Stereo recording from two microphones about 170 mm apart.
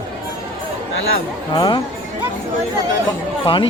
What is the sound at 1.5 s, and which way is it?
Speech, 25° left (ahead or behind).